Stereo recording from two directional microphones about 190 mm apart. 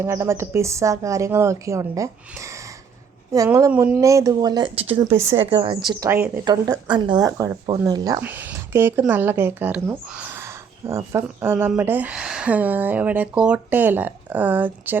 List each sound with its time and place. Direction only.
0.0 s a woman's voice: 15° right (ahead or behind)